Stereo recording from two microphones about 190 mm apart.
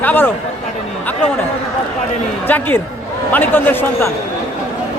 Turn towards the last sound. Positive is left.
turn(degrees=10)  # may be behind; listen again after turning